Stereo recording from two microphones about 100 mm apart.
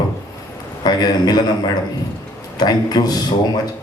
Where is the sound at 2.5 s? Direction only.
40° left (ahead or behind).